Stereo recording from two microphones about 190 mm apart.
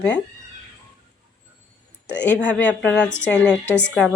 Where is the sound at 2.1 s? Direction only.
5° left (ahead or behind).